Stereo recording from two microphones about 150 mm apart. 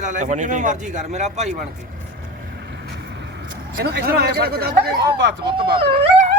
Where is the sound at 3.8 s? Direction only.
90° right.